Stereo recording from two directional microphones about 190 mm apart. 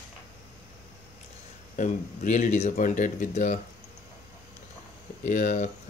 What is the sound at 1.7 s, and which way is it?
Speech, 40° left (ahead or behind).